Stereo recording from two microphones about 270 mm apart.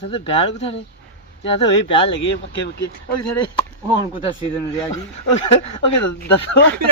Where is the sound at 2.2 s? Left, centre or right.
Left.